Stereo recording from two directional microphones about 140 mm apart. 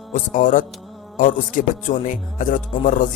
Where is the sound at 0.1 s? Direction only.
65° left (ahead or behind).